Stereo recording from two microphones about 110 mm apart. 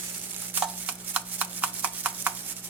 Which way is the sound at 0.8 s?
15° right (ahead or behind).